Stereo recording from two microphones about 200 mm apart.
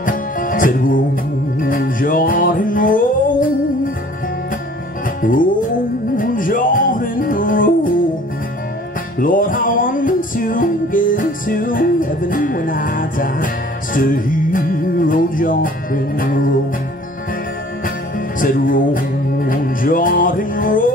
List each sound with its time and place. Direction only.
0.0 s music: 45° left (ahead or behind)
5.2 s music: 40° left (ahead or behind)
9.2 s music: 45° left (ahead or behind)
18.4 s music: 45° left (ahead or behind)